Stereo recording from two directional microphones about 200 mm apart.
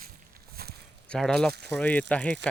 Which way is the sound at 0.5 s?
50° right (ahead or behind).